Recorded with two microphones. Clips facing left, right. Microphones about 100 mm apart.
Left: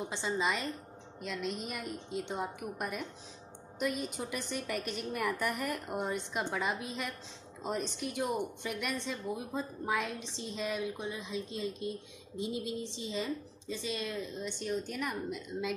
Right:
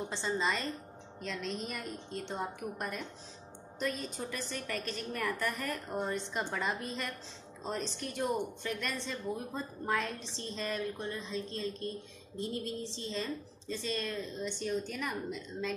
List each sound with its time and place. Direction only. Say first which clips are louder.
0.0 s a woman's voice: even; 5° left (ahead or behind)